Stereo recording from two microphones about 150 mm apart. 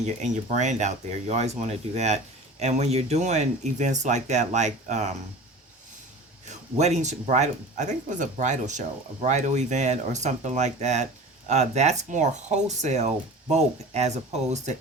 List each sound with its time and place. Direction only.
0.0 s speech: 50° right (ahead or behind)
6.7 s speech: 50° right (ahead or behind)